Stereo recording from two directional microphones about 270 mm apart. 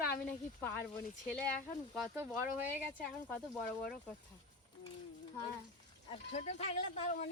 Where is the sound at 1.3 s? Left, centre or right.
Centre.